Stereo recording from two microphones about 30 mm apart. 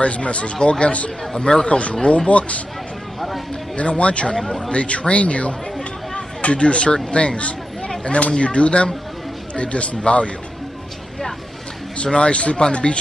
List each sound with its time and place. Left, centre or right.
0.0 s speech: left
3.7 s speech: left
12.0 s speech: left